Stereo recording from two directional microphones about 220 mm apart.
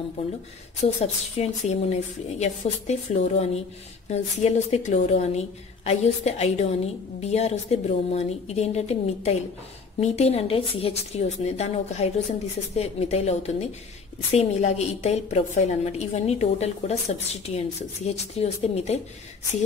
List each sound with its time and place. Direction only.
0.9 s a woman's voice: 30° left (ahead or behind)